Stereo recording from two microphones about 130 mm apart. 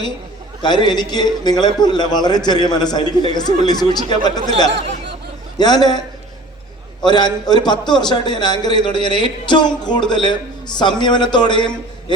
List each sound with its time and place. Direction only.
0.6 s a man's voice: 35° left (ahead or behind)
7.0 s a man's voice: 35° left (ahead or behind)